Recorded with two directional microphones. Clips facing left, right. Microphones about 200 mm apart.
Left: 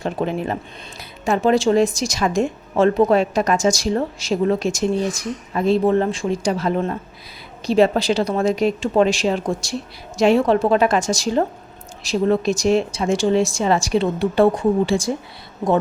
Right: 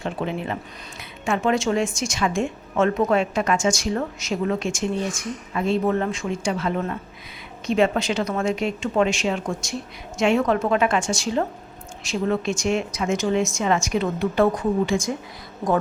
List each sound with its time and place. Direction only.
0.0 s a woman's voice: 40° left (ahead or behind)